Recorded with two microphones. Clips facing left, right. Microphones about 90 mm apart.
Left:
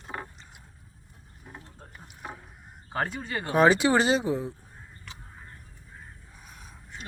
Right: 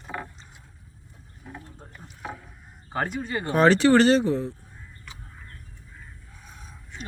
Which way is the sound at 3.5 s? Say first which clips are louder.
Right 3 dB; 10° left (ahead or behind).